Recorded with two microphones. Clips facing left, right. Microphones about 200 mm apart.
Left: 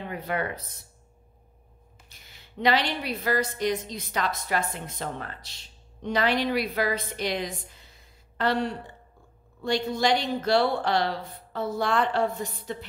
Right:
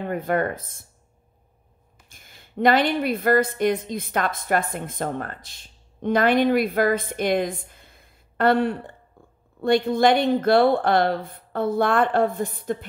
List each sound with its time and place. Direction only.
0.0 s a woman's voice: 50° right (ahead or behind)
2.0 s a woman's voice: 50° right (ahead or behind)